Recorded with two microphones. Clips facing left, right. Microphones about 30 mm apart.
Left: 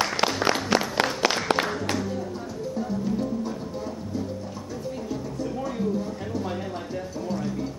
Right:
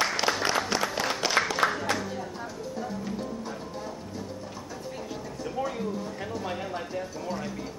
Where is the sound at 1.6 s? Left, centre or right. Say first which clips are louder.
Right 1 dB; left.